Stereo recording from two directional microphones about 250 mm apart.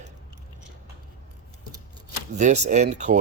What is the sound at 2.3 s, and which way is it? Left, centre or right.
Speech, right.